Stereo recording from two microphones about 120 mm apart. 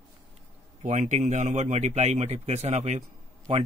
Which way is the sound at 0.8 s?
90° right.